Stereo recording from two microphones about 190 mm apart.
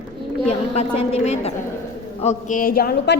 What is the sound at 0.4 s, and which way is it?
A woman's voice, 35° left (ahead or behind).